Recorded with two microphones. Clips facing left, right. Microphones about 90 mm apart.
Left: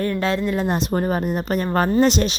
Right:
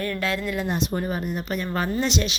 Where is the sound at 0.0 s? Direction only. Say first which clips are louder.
Left 5 dB; 30° left (ahead or behind).